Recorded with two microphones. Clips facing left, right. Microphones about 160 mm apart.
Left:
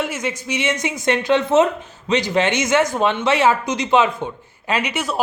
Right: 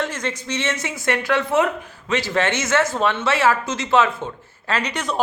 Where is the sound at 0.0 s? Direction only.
10° left (ahead or behind).